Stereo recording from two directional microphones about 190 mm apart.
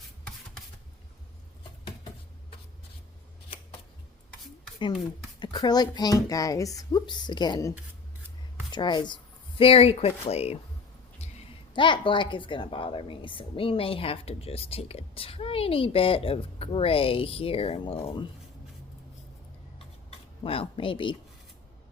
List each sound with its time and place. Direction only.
5.4 s a woman's voice: 20° left (ahead or behind)
8.7 s speech: 25° left (ahead or behind)
11.7 s a woman's voice: 25° left (ahead or behind)
20.1 s a sound: 30° left (ahead or behind)